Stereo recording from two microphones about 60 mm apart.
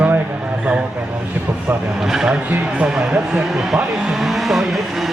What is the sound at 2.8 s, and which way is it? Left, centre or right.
Music, centre.